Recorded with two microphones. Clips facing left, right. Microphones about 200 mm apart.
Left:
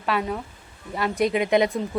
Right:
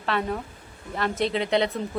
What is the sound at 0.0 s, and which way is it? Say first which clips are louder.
A woman's voice: left 1 dB; 10° left (ahead or behind).